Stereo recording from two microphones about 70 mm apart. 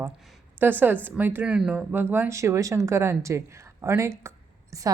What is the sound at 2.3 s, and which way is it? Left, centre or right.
Speech, right.